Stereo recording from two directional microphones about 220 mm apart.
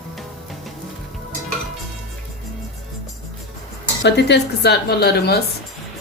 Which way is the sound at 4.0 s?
50° left (ahead or behind).